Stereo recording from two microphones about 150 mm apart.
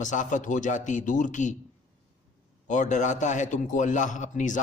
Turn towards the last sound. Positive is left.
turn(degrees=55)  # may be behind; listen again after turning